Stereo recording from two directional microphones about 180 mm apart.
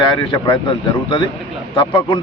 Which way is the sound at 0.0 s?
25° left (ahead or behind).